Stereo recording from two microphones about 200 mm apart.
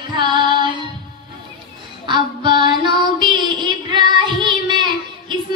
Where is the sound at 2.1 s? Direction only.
25° right (ahead or behind).